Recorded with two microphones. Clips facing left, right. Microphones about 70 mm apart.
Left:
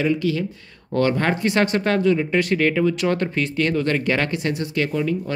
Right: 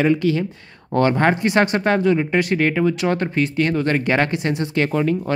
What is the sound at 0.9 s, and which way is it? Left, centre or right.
Speech, right.